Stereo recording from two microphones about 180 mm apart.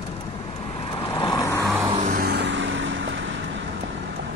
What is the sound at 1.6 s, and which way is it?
Music, 10° right (ahead or behind).